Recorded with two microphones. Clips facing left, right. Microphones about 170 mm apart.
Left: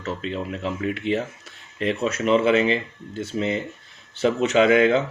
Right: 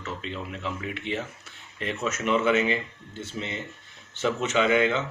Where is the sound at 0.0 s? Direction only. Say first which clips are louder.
Left 6 dB; 35° left (ahead or behind).